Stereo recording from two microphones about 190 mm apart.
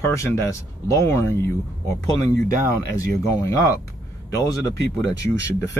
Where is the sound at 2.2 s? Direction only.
45° right (ahead or behind).